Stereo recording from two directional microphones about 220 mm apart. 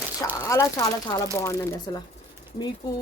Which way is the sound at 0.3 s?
15° left (ahead or behind).